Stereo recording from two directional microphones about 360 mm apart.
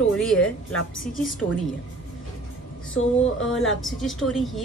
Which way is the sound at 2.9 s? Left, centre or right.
Left.